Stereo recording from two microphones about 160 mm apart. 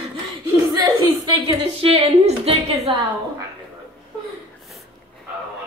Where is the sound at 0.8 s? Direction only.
30° right (ahead or behind).